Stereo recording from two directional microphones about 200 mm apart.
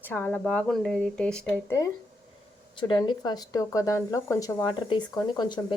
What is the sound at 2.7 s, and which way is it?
Speech, 25° left (ahead or behind).